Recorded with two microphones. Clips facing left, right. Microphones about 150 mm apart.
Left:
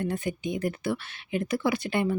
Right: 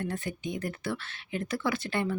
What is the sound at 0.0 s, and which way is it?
Speech, 15° left (ahead or behind).